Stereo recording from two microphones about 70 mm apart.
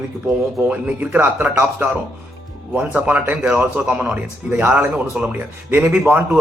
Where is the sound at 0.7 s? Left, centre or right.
Right.